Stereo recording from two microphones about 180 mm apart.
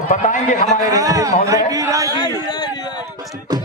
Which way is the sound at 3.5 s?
20° right (ahead or behind).